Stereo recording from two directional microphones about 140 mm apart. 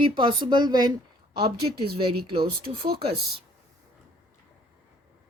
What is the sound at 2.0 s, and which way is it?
Speech, 35° right (ahead or behind).